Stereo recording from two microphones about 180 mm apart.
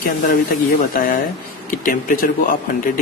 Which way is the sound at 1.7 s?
50° left (ahead or behind).